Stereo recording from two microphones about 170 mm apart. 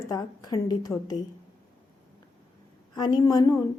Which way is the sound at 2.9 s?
25° left (ahead or behind).